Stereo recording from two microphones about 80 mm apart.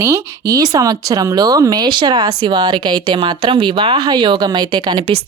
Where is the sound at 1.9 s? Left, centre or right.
Right.